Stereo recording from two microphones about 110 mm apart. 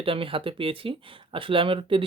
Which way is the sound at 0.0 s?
55° right (ahead or behind).